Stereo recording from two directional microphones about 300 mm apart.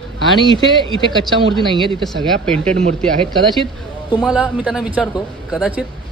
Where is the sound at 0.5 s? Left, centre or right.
Centre.